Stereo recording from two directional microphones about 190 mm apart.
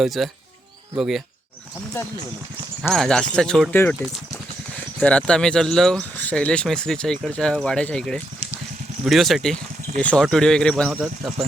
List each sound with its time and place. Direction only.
0.0 s speech: centre (ahead or behind)
2.9 s speech: centre (ahead or behind)
4.9 s speech: 5° left (ahead or behind)